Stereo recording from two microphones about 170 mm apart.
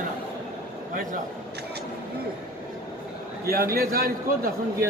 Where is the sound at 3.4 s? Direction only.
60° right (ahead or behind).